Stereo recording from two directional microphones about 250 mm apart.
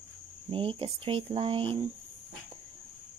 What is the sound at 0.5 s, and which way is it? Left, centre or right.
Speech, right.